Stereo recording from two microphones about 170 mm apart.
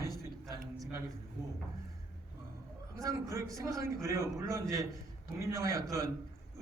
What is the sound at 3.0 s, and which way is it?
A man's voice, 20° right (ahead or behind).